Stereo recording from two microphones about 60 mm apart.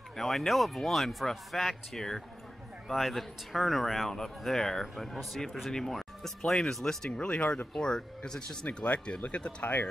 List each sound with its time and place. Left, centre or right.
0.1 s speech: centre
7.1 s speech: centre
8.6 s speech: left